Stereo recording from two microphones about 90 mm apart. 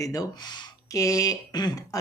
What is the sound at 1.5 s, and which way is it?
Speech, 50° left (ahead or behind).